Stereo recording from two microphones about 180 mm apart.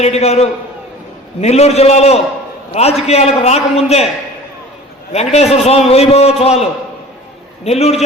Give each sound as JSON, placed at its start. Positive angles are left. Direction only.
{"t": 0.0, "sound": "a man's voice", "side_deg": 35}
{"t": 5.1, "sound": "a man's voice", "side_deg": 35}